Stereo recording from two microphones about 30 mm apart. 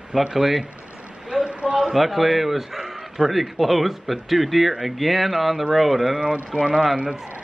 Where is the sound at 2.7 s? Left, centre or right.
Centre.